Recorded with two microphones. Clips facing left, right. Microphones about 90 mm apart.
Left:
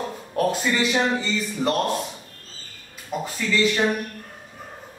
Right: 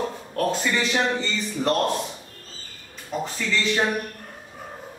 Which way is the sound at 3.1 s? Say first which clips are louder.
Even; 5° left (ahead or behind).